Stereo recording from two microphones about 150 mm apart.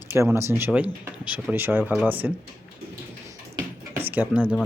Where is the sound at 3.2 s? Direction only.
15° right (ahead or behind).